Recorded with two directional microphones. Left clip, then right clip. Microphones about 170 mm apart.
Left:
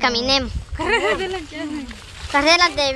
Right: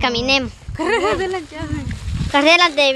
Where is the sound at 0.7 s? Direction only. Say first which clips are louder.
Right 1 dB; 55° right (ahead or behind).